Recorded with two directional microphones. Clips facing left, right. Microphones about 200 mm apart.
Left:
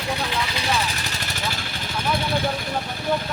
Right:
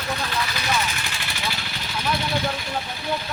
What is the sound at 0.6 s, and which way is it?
Vehicle, 30° left (ahead or behind).